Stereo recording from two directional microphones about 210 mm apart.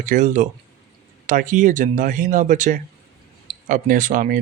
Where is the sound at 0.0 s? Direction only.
35° right (ahead or behind).